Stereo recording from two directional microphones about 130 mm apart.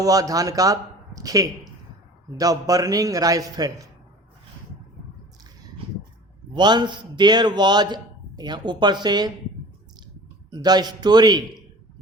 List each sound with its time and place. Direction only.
0.0 s a man's voice: 25° right (ahead or behind)
6.5 s a man's voice: 35° right (ahead or behind)
10.5 s a man's voice: 30° right (ahead or behind)